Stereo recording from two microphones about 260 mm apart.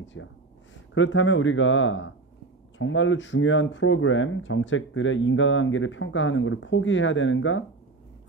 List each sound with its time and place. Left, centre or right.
0.0 s speech: left